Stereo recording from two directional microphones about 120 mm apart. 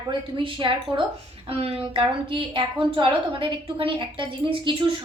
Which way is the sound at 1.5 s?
55° right (ahead or behind).